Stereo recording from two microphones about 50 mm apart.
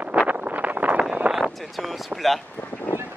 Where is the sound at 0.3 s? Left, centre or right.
Right.